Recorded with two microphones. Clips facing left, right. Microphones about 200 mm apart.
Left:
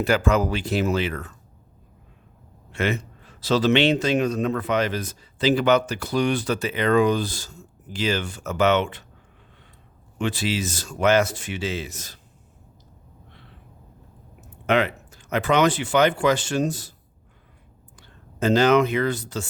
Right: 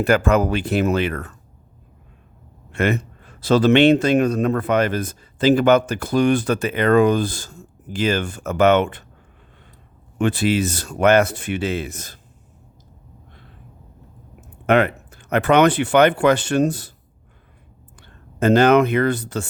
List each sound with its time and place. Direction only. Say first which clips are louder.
0.0 s speech: right 4 dB; 55° right (ahead or behind)
2.7 s a man's voice: right 4 dB; 55° right (ahead or behind)
10.2 s speech: right 7 dB; 55° right (ahead or behind)
14.7 s speech: right 5 dB; 55° right (ahead or behind)
18.0 s speech: right 5 dB; 60° right (ahead or behind)